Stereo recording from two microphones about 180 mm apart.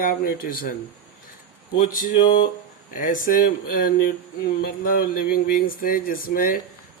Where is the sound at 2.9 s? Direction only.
50° left (ahead or behind).